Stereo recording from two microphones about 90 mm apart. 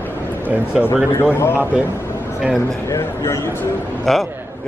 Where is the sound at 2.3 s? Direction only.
5° right (ahead or behind).